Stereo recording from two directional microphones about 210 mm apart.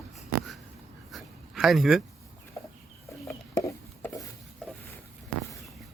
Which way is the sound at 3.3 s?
15° left (ahead or behind).